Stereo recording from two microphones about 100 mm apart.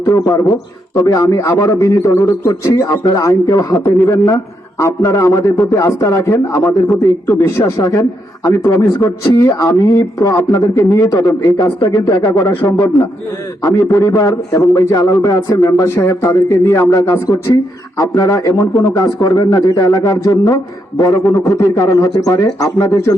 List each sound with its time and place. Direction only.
0.0 s a man's voice: 30° left (ahead or behind)